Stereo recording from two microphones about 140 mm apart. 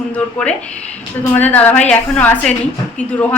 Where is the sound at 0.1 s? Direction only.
10° left (ahead or behind).